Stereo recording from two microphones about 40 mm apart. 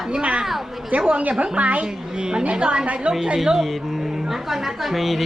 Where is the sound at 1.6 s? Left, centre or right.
Right.